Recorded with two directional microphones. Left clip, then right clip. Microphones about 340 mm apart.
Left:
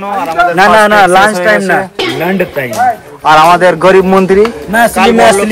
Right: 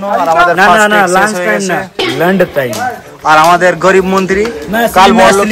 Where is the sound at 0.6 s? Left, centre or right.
Centre.